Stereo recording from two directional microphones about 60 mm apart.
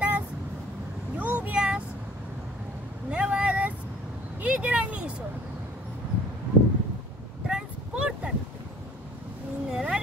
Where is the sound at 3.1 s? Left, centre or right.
Centre.